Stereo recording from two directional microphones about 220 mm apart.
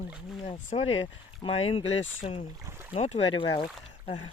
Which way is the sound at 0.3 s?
30° left (ahead or behind).